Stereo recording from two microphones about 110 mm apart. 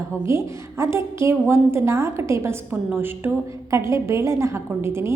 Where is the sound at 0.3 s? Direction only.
25° right (ahead or behind).